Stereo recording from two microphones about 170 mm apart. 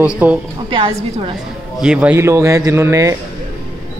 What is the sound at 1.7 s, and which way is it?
A man's voice, 5° right (ahead or behind).